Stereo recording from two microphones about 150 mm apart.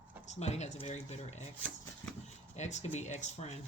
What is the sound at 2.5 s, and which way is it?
Speech, 50° left (ahead or behind).